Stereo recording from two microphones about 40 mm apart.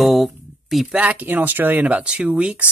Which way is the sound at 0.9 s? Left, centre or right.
Right.